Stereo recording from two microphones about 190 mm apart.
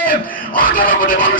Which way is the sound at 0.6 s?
45° left (ahead or behind).